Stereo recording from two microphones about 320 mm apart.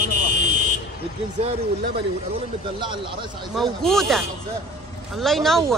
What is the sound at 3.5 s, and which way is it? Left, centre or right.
Speech, centre.